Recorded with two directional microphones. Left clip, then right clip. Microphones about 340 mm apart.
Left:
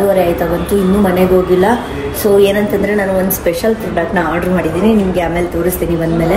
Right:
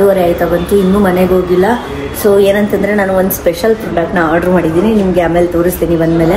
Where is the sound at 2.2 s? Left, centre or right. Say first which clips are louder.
Right 2 dB; centre.